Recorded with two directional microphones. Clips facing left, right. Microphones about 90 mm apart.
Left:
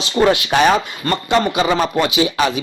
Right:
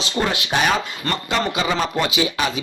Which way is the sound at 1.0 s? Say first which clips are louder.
Left 6 dB; 35° left (ahead or behind).